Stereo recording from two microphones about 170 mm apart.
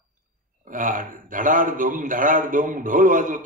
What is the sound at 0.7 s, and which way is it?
A man's voice, 55° right (ahead or behind).